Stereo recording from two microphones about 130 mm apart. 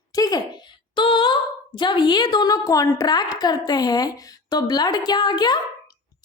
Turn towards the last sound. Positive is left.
turn(degrees=35)  # may be behind; listen again after turning